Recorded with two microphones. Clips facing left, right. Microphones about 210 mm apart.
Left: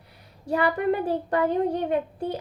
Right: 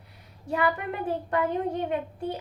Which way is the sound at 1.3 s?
35° left (ahead or behind).